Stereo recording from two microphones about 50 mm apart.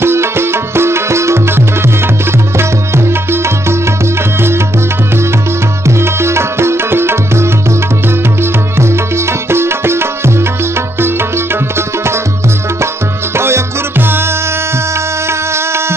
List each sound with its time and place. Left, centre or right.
0.0 s music: right
5.9 s music: right
15.2 s a sound: right